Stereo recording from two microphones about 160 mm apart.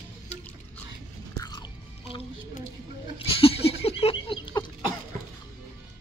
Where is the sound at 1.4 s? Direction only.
25° left (ahead or behind).